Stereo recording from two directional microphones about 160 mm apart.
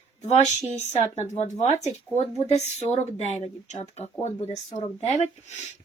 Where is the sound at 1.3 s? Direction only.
45° left (ahead or behind).